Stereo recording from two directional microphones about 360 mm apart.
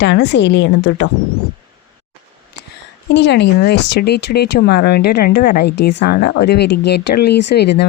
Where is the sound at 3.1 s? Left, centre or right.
Left.